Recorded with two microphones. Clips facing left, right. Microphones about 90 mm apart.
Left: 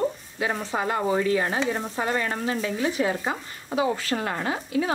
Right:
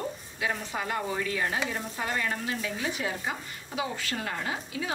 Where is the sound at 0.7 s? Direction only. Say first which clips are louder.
Left 7 dB; 35° left (ahead or behind).